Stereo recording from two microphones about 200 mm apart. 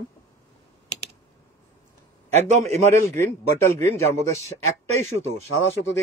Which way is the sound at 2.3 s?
35° right (ahead or behind).